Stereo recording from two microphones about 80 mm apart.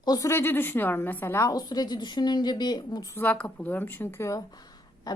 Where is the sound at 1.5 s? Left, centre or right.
Left.